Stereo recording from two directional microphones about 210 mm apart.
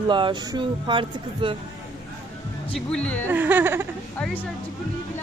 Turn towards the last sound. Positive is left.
turn(degrees=5)  # may be behind; listen again after turning